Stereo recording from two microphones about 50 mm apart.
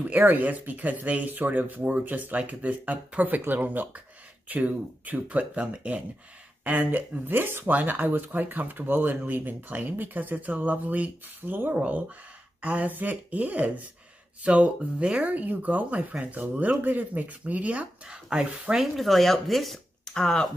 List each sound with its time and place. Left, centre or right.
0.0 s speech: right
6.6 s speech: right
18.0 s speech: centre
18.9 s speech: centre
20.2 s speech: centre